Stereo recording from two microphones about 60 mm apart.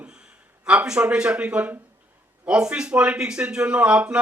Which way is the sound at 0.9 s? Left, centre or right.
Centre.